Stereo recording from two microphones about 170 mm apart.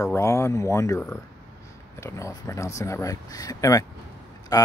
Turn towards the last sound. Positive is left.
turn(degrees=20)  # may be behind; listen again after turning